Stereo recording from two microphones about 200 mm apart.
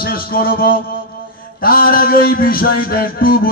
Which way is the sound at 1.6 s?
45° left (ahead or behind).